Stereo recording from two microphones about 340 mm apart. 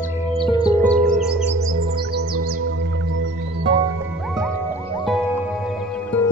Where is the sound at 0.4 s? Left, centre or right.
Centre.